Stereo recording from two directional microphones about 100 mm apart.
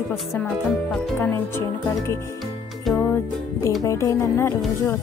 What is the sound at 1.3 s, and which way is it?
Speech, 25° left (ahead or behind).